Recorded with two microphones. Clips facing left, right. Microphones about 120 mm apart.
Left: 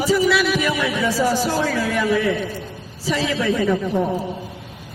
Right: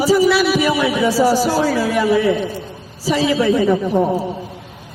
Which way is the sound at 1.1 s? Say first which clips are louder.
Right 4 dB; 35° right (ahead or behind).